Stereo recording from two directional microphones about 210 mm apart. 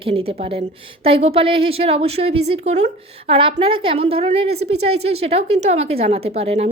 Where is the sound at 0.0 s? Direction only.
25° right (ahead or behind).